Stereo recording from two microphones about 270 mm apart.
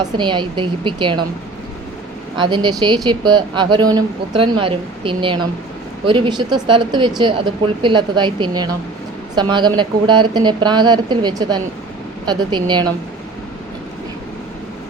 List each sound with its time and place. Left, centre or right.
0.0 s a woman's voice: centre
2.4 s a woman's voice: centre